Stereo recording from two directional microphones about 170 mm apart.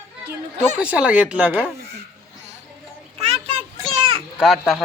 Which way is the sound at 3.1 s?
35° right (ahead or behind).